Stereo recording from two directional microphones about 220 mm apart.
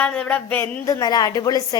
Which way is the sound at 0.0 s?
5° left (ahead or behind).